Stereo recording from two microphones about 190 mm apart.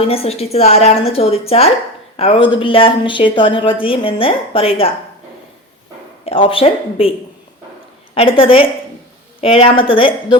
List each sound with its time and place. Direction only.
0.0 s a woman's voice: 30° left (ahead or behind)
6.2 s a woman's voice: 30° left (ahead or behind)
8.1 s a woman's voice: 30° left (ahead or behind)